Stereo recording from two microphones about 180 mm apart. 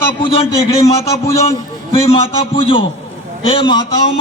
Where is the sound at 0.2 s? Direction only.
30° left (ahead or behind).